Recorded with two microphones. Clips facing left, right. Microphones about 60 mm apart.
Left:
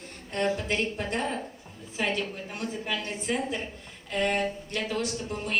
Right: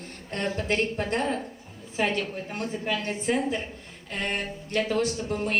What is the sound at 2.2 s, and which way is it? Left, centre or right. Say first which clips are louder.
A woman's voice: right 2 dB; right.